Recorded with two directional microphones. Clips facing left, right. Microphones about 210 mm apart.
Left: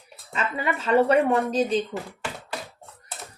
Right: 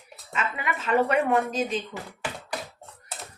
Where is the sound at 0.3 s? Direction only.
35° left (ahead or behind).